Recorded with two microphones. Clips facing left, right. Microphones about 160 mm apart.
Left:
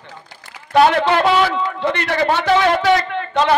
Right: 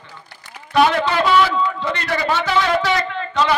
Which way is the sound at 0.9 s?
60° left (ahead or behind).